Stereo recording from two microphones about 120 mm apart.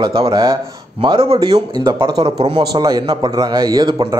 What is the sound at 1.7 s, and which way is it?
A man's voice, 35° right (ahead or behind).